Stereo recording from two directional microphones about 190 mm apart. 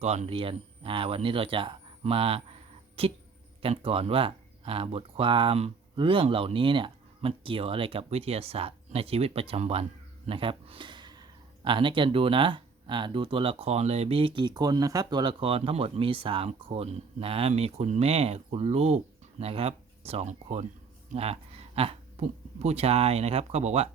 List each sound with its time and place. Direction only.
0.0 s speech: 35° right (ahead or behind)